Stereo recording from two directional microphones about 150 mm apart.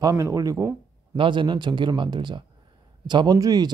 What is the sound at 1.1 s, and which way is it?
Speech, 35° right (ahead or behind).